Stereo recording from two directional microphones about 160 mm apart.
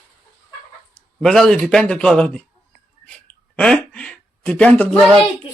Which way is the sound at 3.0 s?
5° left (ahead or behind).